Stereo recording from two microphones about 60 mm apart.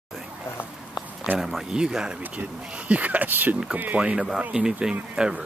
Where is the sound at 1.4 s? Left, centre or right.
Centre.